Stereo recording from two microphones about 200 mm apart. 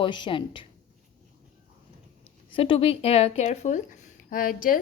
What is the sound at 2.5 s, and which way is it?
A woman's voice, 25° left (ahead or behind).